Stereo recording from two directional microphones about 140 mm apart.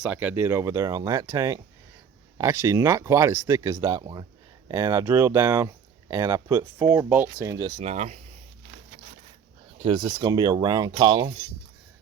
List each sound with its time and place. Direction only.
0.0 s speech: 10° right (ahead or behind); by 7.9 s 30° right (ahead or behind)
7.9 s speech: 55° right (ahead or behind)
9.7 s speech: 35° right (ahead or behind)